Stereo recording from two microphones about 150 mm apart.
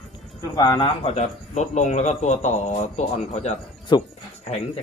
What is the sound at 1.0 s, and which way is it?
A man's voice, 50° left (ahead or behind).